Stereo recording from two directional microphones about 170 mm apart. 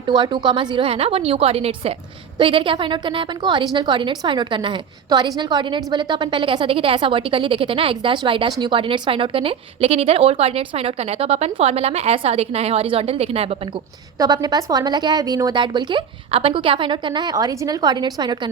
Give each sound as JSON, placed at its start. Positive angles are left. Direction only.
{"t": 0.1, "sound": "a woman's voice", "side_deg": -25}
{"t": 14.2, "sound": "a woman's voice", "side_deg": -20}